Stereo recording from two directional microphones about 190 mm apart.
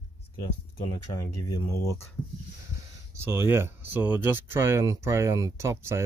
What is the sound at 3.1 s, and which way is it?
Speech, 10° right (ahead or behind).